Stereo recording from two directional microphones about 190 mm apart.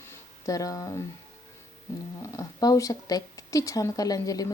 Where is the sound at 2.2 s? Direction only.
20° left (ahead or behind).